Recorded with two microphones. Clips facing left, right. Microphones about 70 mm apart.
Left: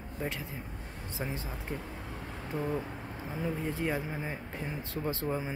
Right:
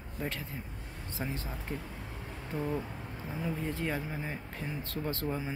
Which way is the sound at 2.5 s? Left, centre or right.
Centre.